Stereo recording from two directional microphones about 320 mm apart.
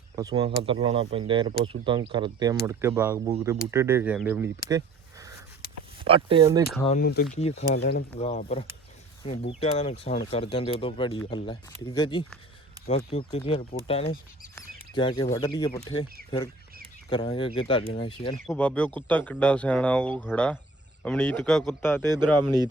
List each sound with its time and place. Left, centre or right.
0.2 s speech: centre
6.1 s speech: centre
6.8 s speech: left
7.8 s speech: left; by 12.2 s centre
12.8 s speech: left
17.1 s speech: centre
18.4 s speech: centre
22.1 s speech: centre